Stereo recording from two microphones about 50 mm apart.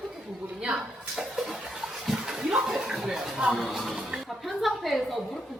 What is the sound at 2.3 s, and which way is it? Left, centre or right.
Speech, centre.